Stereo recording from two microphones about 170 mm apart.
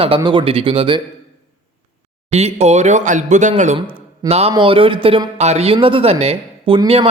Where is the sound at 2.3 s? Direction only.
40° right (ahead or behind).